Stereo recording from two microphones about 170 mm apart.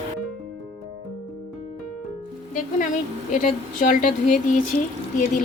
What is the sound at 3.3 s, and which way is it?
Speech, 50° left (ahead or behind).